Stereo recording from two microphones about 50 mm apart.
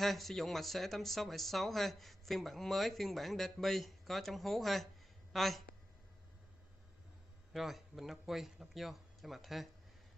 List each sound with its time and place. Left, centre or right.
0.0 s speech: centre
7.5 s speech: centre